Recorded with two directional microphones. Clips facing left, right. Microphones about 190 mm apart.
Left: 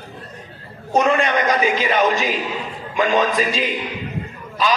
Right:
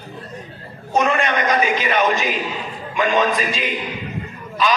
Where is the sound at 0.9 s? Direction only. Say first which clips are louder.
Left 2 dB; 35° left (ahead or behind).